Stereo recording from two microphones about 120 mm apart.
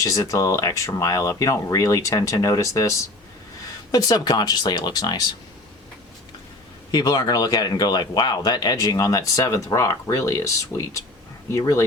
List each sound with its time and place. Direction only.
0.0 s speech: 25° left (ahead or behind)
3.9 s speech: 30° left (ahead or behind)
6.9 s speech: 35° left (ahead or behind)